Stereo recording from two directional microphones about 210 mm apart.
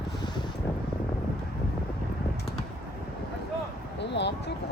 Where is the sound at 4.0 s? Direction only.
55° left (ahead or behind).